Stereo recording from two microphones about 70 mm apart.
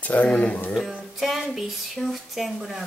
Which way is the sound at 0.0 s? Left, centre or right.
Left.